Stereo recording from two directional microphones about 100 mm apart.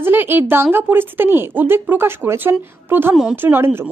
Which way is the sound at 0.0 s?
20° right (ahead or behind).